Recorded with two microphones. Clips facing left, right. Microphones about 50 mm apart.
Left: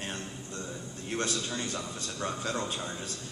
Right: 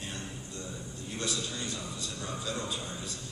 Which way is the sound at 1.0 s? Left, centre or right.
Left.